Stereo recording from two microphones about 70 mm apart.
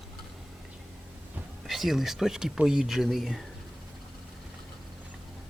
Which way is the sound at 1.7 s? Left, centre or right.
Centre.